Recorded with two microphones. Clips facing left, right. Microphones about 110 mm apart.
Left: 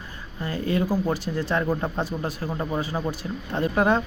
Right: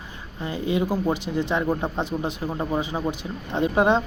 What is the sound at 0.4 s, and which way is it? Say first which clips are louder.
Speech: right 1 dB; 20° right (ahead or behind).